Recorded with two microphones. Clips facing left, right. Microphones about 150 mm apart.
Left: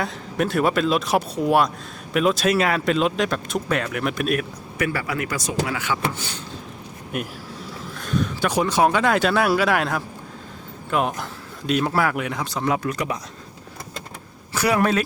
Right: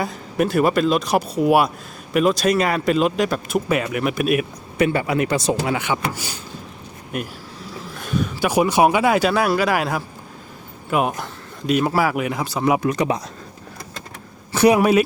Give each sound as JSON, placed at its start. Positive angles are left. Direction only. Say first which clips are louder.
{"t": 0.0, "sound": "speech", "louder": "right 3 dB", "side_deg": 0}
{"t": 4.8, "sound": "speech", "louder": "right 6 dB", "side_deg": -25}
{"t": 6.1, "sound": "speech", "louder": "right 1 dB", "side_deg": -10}
{"t": 7.9, "sound": "speech", "louder": "right 1 dB", "side_deg": -5}
{"t": 14.5, "sound": "a sound", "louder": "right 7 dB", "side_deg": -25}
{"t": 14.8, "sound": "speech", "louder": "right 5 dB", "side_deg": -10}